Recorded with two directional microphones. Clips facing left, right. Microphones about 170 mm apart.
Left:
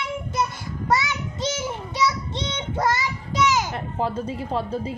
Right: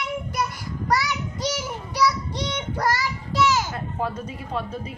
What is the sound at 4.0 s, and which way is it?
A woman's voice, 30° left (ahead or behind).